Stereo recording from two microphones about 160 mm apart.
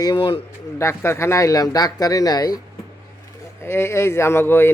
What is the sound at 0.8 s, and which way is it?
Speech, 15° left (ahead or behind).